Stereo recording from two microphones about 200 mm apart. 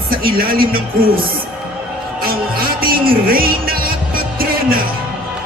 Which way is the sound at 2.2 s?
45° right (ahead or behind).